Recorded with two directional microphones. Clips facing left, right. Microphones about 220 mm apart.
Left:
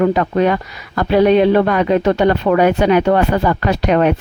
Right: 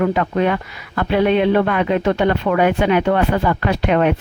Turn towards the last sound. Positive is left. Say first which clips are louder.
# left 2 dB
turn(degrees=40)  # may be behind; listen again after turning